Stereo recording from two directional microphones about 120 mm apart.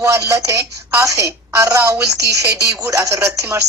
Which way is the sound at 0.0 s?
25° right (ahead or behind).